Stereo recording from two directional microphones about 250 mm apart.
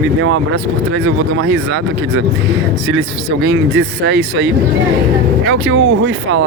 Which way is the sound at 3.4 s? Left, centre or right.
Right.